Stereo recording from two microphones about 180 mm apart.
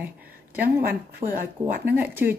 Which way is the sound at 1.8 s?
10° right (ahead or behind).